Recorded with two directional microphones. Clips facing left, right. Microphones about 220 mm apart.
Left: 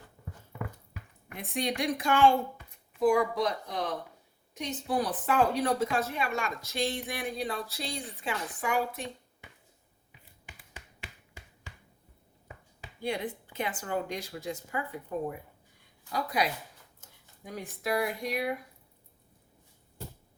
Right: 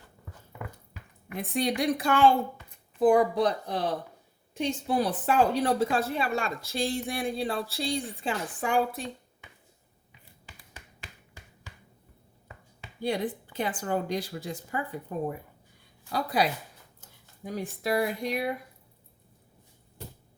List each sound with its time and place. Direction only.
1.4 s a woman's voice: 35° right (ahead or behind)
13.0 s speech: 35° right (ahead or behind)
16.1 s speech: 35° right (ahead or behind)